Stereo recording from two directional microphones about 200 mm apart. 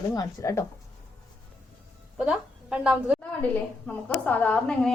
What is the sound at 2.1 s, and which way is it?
A woman's voice, 5° right (ahead or behind).